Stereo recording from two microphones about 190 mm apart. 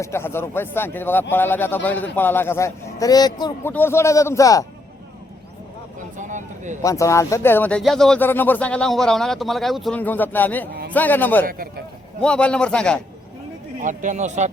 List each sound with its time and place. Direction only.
0.0 s speech: 15° left (ahead or behind)
3.7 s speech: 10° left (ahead or behind)
6.1 s speech: 40° right (ahead or behind)
6.8 s speech: 15° left (ahead or behind)
11.4 s speech: 50° right (ahead or behind)
12.2 s a man's voice: 5° left (ahead or behind)
13.8 s speech: 40° right (ahead or behind)